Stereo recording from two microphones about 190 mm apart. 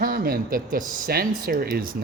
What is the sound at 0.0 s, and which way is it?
Speech, 50° right (ahead or behind).